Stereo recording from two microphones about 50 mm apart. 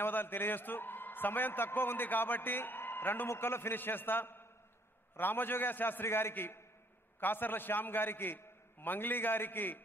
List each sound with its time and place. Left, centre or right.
0.0 s a man's voice: left
6.0 s a man's voice: left
6.3 s a man's voice: left